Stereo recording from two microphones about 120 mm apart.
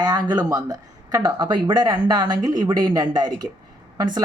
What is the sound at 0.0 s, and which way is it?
Speech, 35° right (ahead or behind).